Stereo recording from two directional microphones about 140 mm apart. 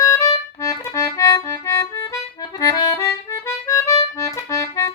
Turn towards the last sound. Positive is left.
turn(degrees=25)  # may be behind; listen again after turning